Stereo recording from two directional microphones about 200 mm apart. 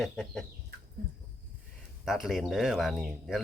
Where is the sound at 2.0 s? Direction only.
Centre (ahead or behind).